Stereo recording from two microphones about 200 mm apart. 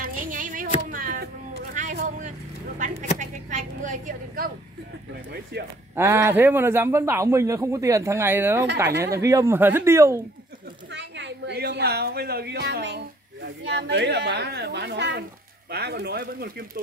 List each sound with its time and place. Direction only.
0.0 s a sound: 40° right (ahead or behind)
0.8 s chop: 45° right (ahead or behind)
3.2 s a sound: 40° right (ahead or behind)
5.3 s speech: 55° right (ahead or behind)
5.9 s a man's voice: 15° right (ahead or behind)
10.9 s a woman's voice: 60° right (ahead or behind)